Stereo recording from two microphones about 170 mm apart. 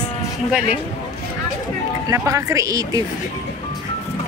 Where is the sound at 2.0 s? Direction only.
20° right (ahead or behind).